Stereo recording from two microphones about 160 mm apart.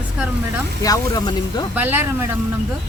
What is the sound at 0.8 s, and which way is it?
Speech, 20° left (ahead or behind).